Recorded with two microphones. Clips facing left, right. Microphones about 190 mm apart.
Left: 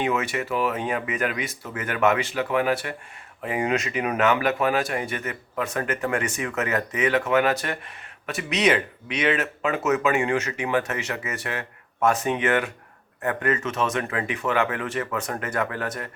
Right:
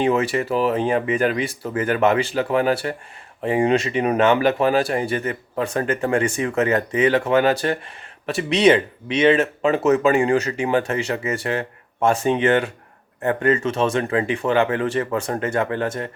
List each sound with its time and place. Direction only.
0.0 s speech: 35° right (ahead or behind)